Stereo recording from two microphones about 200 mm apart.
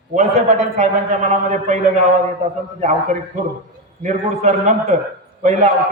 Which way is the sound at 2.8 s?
40° right (ahead or behind).